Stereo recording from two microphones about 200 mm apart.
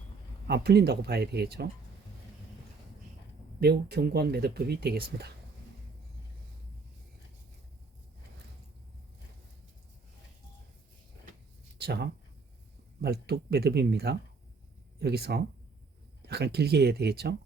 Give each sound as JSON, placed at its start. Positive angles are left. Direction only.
{"t": 0.4, "sound": "speech", "side_deg": -55}
{"t": 3.6, "sound": "speech", "side_deg": -55}
{"t": 11.8, "sound": "speech", "side_deg": -55}